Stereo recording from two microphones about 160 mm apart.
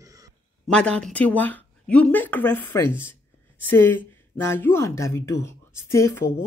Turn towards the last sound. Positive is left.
turn(degrees=20)  # may be behind; listen again after turning